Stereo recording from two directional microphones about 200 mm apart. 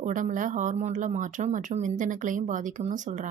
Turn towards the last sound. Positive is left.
turn(degrees=-40)  # may be behind; listen again after turning